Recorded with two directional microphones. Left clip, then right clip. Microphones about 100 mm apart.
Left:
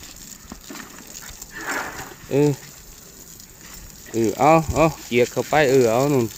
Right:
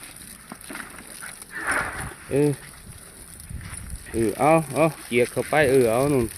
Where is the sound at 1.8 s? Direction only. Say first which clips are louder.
Right 1 dB; 15° left (ahead or behind).